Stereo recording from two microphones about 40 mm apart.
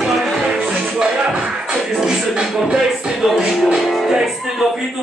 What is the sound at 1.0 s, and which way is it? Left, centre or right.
Music, centre.